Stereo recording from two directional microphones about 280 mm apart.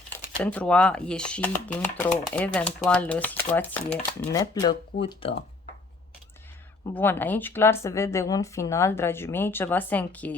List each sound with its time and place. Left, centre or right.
0.1 s speech: centre
6.9 s speech: centre